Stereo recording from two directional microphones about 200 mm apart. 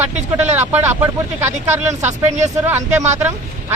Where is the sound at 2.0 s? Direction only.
35° right (ahead or behind).